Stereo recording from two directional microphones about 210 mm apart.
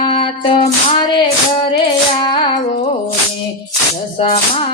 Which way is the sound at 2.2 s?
25° left (ahead or behind).